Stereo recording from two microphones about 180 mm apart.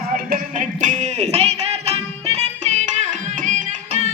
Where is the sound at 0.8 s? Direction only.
45° right (ahead or behind).